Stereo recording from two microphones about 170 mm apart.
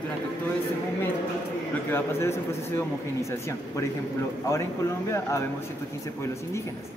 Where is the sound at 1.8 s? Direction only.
15° left (ahead or behind).